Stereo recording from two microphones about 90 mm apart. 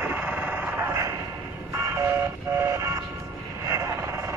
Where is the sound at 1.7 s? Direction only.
30° right (ahead or behind).